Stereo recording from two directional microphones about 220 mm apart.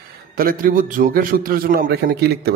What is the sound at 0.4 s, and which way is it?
A man's voice, 40° right (ahead or behind).